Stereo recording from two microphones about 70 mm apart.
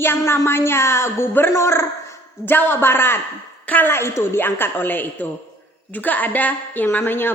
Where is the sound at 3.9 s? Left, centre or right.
Left.